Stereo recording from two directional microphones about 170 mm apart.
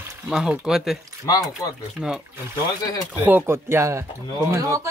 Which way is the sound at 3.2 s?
10° right (ahead or behind).